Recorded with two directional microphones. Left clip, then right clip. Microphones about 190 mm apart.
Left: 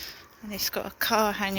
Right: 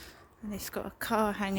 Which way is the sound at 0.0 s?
25° right (ahead or behind).